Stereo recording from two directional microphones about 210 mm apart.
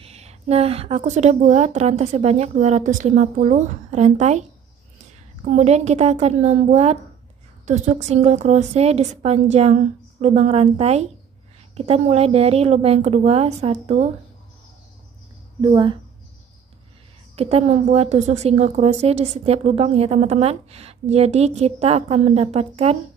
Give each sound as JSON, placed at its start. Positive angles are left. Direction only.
{"t": 0.0, "sound": "a woman's voice", "side_deg": -30}
{"t": 15.6, "sound": "a woman's voice", "side_deg": -20}
{"t": 17.4, "sound": "a woman's voice", "side_deg": -30}